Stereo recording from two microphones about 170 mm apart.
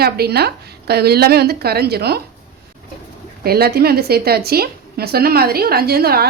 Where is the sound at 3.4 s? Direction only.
65° right (ahead or behind).